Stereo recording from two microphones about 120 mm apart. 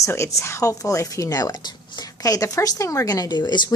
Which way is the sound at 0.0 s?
25° left (ahead or behind).